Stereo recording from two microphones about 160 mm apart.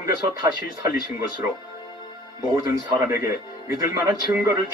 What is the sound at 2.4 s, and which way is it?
Speech, 25° right (ahead or behind).